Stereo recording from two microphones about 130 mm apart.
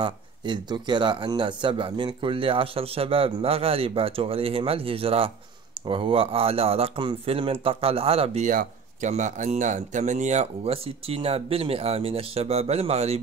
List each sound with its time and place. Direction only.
0.0 s speech: 35° right (ahead or behind)
8.5 s speech: 75° right (ahead or behind); by 13.2 s 55° right (ahead or behind)